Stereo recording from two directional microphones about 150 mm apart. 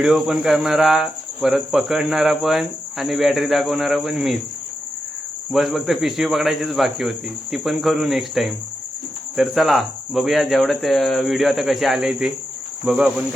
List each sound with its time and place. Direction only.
0.0 s speech: 5° right (ahead or behind)
5.5 s speech: centre (ahead or behind)
12.8 s cricket: 5° right (ahead or behind)